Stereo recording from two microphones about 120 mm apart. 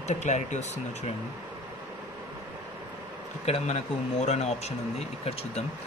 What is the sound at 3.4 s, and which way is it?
A man's voice, 60° left (ahead or behind).